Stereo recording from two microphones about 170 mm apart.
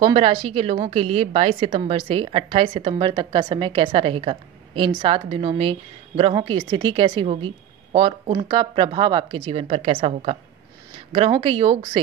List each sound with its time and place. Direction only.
0.0 s a woman's voice: 30° right (ahead or behind)